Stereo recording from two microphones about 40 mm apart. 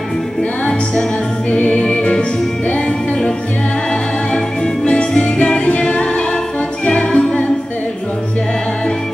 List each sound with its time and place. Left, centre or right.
1.8 s music: left
4.8 s music: left